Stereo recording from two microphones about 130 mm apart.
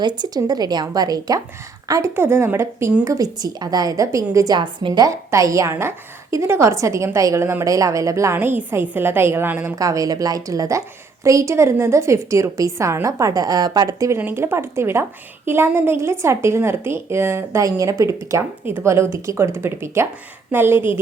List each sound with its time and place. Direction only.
0.2 s a woman's voice: 30° right (ahead or behind); by 9.7 s 15° right (ahead or behind)
9.7 s a woman's voice: 25° right (ahead or behind)
14.2 s a woman's voice: 15° right (ahead or behind)